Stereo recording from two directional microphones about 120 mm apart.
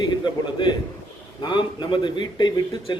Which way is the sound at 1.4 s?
40° left (ahead or behind).